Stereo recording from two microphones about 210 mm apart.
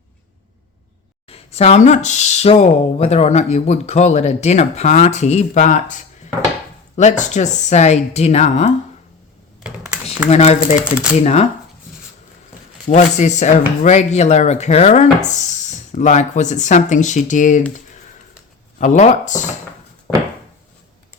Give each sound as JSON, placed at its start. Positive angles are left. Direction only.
{"t": 1.3, "sound": "speech", "side_deg": 30}
{"t": 9.6, "sound": "computer keyboard", "side_deg": -5}
{"t": 10.2, "sound": "speech", "side_deg": 30}
{"t": 12.9, "sound": "speech", "side_deg": 35}
{"t": 18.8, "sound": "speech", "side_deg": 35}